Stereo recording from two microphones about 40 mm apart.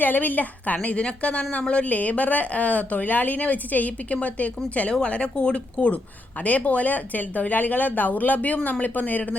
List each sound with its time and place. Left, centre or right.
0.0 s speech: left
6.4 s speech: left